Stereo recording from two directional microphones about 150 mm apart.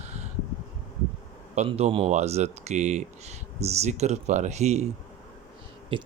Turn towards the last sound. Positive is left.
turn(degrees=-35)  # may be behind; listen again after turning